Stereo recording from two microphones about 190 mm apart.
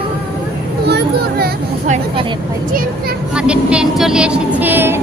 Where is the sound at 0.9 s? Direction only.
60° right (ahead or behind).